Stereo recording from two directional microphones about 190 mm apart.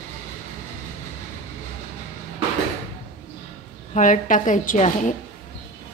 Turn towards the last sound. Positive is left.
turn(degrees=40)  # may be behind; listen again after turning